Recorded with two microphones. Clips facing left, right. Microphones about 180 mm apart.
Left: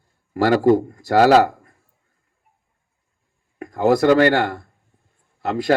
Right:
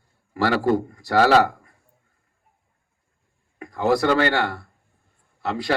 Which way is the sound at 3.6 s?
50° left (ahead or behind).